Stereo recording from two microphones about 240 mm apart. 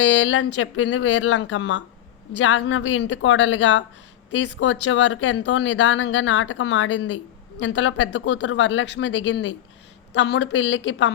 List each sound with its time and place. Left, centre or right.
0.0 s speech: left